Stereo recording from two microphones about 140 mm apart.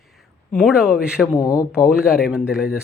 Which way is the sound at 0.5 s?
5° right (ahead or behind).